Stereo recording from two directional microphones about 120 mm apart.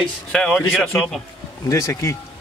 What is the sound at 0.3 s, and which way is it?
Speech, 5° left (ahead or behind).